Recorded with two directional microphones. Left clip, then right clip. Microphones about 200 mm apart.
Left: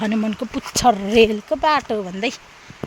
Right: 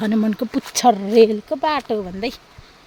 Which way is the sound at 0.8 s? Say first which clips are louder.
Right 1 dB; 15° right (ahead or behind).